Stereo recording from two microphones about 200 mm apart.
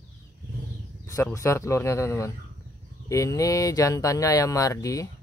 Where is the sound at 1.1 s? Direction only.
15° left (ahead or behind).